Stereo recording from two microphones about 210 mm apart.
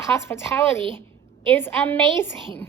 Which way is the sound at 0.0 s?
10° left (ahead or behind).